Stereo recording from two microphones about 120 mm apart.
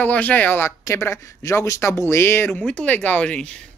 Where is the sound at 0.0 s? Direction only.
10° left (ahead or behind).